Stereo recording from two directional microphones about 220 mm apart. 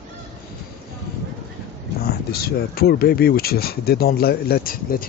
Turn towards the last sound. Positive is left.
turn(degrees=40)  # may be behind; listen again after turning